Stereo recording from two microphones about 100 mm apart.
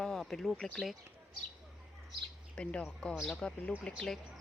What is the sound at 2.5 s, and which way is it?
Speech, 10° left (ahead or behind).